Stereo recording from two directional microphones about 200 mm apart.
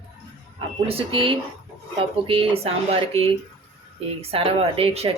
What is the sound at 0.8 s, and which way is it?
Speech, 30° right (ahead or behind).